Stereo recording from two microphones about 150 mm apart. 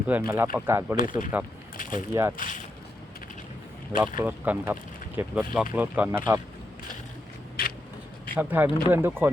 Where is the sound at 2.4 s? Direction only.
60° left (ahead or behind).